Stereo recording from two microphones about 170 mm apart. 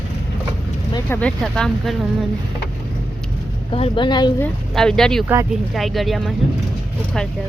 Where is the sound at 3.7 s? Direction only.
30° left (ahead or behind).